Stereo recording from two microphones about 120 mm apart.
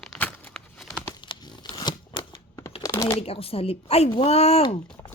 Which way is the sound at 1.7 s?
35° left (ahead or behind).